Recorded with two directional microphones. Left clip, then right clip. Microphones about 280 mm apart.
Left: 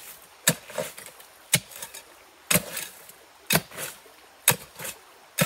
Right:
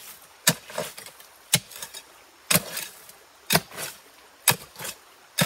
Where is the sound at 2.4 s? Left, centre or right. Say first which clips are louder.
Right 1 dB; centre.